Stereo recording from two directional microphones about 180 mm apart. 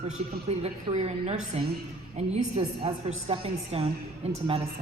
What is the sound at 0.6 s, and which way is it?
A woman's voice, 35° right (ahead or behind).